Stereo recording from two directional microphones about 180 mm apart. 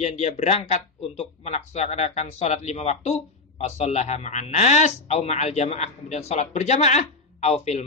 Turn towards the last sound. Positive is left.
turn(degrees=40)  # may be behind; listen again after turning